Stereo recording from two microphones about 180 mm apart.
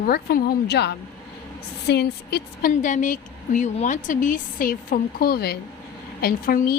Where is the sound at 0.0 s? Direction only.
55° left (ahead or behind).